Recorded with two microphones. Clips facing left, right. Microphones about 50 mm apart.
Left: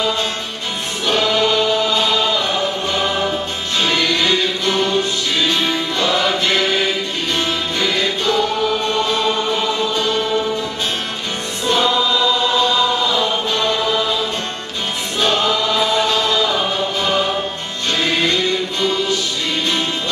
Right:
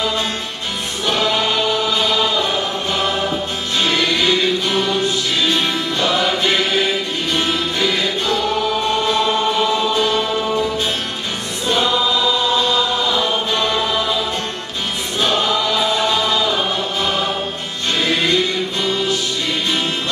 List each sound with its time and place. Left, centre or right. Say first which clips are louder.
1.2 s choir: left 2 dB; centre
2.0 s chant: even; centre
3.8 s music: even; centre
5.9 s music: even; right
15.8 s chant: left 1 dB; centre